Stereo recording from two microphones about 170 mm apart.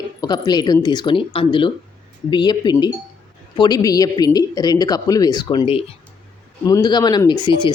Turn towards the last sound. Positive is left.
turn(degrees=25)  # may be behind; listen again after turning